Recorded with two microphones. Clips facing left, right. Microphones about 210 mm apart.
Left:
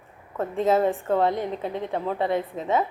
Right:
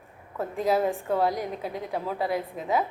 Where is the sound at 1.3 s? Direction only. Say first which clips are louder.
Left 3 dB; 25° left (ahead or behind).